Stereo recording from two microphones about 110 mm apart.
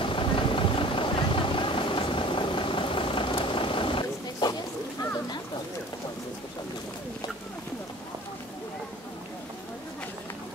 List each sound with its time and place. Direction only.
0.0 s vehicle: 50° left (ahead or behind)